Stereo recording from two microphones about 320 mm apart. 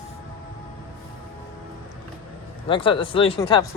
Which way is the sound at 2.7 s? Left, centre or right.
Centre.